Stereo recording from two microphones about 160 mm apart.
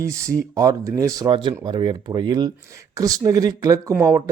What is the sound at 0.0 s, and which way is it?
Speech, 20° right (ahead or behind).